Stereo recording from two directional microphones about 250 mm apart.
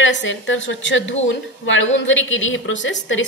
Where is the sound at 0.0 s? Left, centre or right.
Left.